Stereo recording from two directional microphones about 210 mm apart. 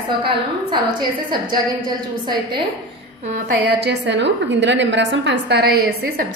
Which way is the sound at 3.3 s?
50° right (ahead or behind).